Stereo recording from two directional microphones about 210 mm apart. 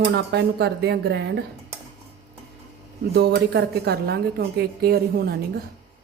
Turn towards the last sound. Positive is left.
turn(degrees=-45)  # may be behind; listen again after turning